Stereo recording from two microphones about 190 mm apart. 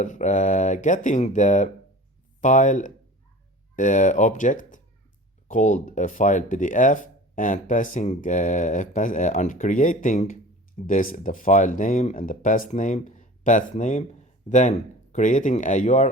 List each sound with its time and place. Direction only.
0.0 s speech: 40° left (ahead or behind)